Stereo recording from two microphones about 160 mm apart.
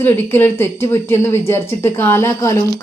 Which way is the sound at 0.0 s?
15° left (ahead or behind).